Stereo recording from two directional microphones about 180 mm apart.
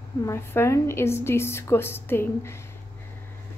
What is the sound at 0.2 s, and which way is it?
A woman's voice, 15° left (ahead or behind).